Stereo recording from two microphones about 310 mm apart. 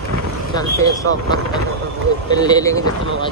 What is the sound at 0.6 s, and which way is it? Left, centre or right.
Speech, centre.